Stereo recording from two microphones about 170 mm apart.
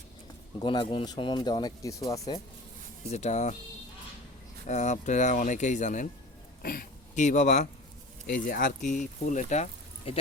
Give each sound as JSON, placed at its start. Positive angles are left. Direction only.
{"t": 0.6, "sound": "speech", "side_deg": 30}
{"t": 3.1, "sound": "speech", "side_deg": 40}
{"t": 4.6, "sound": "speech", "side_deg": 45}
{"t": 6.6, "sound": "speech", "side_deg": 60}
{"t": 8.3, "sound": "speech", "side_deg": 55}
{"t": 10.1, "sound": "speech", "side_deg": 35}